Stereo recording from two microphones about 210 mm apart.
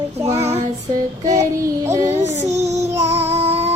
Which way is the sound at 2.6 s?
30° right (ahead or behind).